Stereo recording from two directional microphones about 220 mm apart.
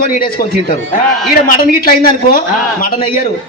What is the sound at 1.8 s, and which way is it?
Speech, 40° left (ahead or behind).